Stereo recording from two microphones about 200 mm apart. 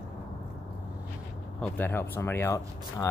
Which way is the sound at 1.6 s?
10° left (ahead or behind).